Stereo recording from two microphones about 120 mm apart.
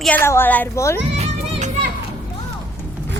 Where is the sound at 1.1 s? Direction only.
70° right (ahead or behind).